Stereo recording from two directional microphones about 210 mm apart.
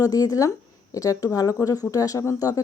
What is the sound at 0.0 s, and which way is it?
Speech, 15° left (ahead or behind).